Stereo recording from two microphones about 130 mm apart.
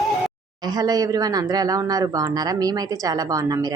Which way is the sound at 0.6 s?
30° right (ahead or behind).